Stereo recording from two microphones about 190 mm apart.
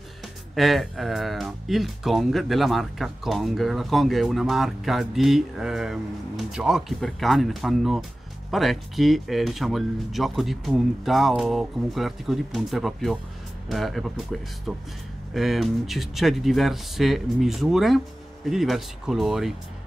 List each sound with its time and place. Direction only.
0.6 s speech: centre (ahead or behind)